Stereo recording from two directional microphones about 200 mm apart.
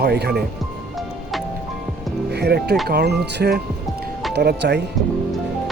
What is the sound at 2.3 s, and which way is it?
Speech, 55° right (ahead or behind).